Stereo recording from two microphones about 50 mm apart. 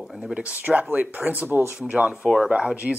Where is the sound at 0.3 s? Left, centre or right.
Right.